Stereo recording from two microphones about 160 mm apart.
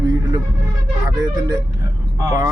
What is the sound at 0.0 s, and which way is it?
Vehicle, 25° right (ahead or behind).